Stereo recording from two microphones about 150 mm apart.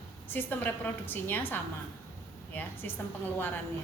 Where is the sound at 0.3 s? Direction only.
15° left (ahead or behind).